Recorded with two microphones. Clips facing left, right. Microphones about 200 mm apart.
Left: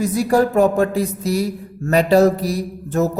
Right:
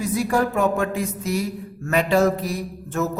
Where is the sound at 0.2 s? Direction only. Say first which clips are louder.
Left 6 dB; 35° left (ahead or behind).